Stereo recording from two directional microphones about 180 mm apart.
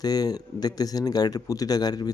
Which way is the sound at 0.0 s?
20° left (ahead or behind).